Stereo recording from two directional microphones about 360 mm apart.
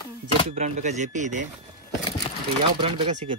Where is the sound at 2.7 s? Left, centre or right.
Centre.